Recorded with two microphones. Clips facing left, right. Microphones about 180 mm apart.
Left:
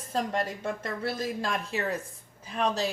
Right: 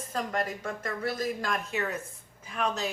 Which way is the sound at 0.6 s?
30° left (ahead or behind).